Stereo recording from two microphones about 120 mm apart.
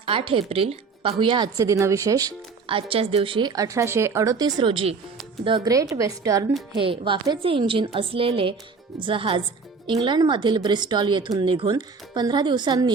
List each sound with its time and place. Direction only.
0.0 s speech: 50° right (ahead or behind)
1.5 s speech: 25° right (ahead or behind)
2.6 s speech: 50° right (ahead or behind)
3.5 s speech: 30° right (ahead or behind); by 4.9 s 50° right (ahead or behind)
5.6 s speech: 30° right (ahead or behind)
6.8 s speech: 45° right (ahead or behind)